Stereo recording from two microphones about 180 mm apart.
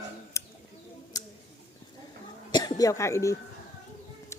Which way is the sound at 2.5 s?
20° left (ahead or behind).